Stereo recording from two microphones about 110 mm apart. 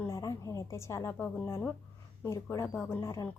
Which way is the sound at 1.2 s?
25° left (ahead or behind).